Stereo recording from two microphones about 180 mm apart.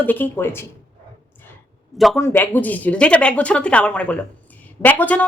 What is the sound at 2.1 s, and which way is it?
Speech, 10° left (ahead or behind).